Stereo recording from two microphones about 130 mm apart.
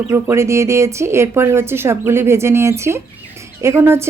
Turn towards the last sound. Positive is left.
turn(degrees=-20)  # may be behind; listen again after turning